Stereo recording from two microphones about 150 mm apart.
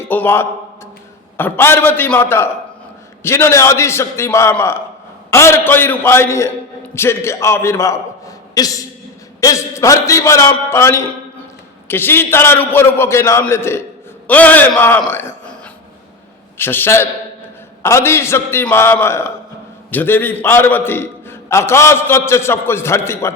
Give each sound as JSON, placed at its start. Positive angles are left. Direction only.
{"t": 0.0, "sound": "a man's voice", "side_deg": 15}
{"t": 15.1, "sound": "a sound", "side_deg": 15}
{"t": 16.6, "sound": "a man's voice", "side_deg": 15}